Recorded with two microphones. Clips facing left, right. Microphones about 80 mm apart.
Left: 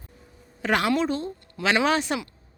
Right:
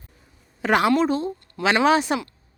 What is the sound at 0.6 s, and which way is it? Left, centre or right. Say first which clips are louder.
Speech: right 4 dB; centre.